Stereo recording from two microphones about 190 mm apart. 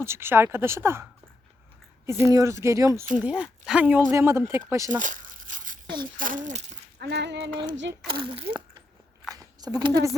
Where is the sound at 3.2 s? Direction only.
5° right (ahead or behind).